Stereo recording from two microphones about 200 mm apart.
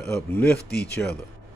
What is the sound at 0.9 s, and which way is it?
Speech, 5° left (ahead or behind).